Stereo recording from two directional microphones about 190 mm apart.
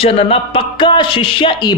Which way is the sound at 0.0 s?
30° left (ahead or behind).